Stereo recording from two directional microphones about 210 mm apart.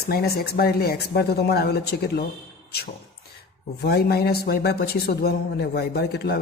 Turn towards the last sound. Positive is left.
turn(degrees=50)  # may be behind; listen again after turning